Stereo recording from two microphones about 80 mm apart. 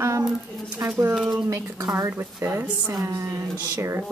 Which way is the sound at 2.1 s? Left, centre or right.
Right.